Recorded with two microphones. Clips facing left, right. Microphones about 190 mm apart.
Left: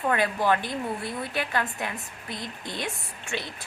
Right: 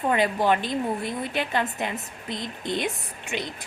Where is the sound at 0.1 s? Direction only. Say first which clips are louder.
Right 2 dB; 20° right (ahead or behind).